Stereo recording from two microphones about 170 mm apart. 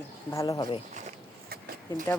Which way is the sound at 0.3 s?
20° left (ahead or behind).